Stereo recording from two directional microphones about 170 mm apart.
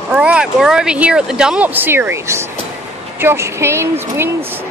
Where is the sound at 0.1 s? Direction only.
5° right (ahead or behind).